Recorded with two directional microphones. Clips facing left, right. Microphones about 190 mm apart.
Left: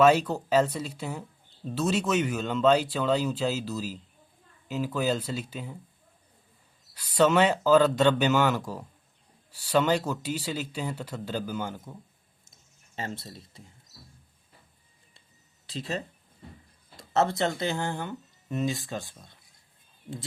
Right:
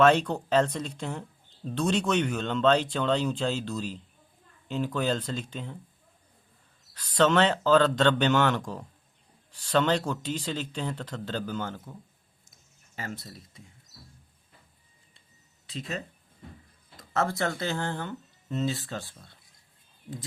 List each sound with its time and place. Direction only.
0.0 s speech: 5° left (ahead or behind)
6.9 s speech: 10° left (ahead or behind)
13.0 s speech: 25° left (ahead or behind)
15.6 s speech: 35° left (ahead or behind); by 19.4 s 15° left (ahead or behind)